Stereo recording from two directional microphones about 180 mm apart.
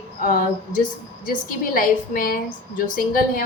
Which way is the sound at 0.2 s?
50° left (ahead or behind).